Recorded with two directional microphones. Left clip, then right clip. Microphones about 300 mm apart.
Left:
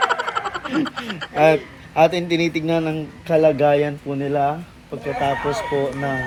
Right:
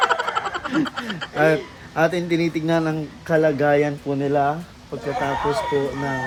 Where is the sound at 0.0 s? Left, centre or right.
Centre.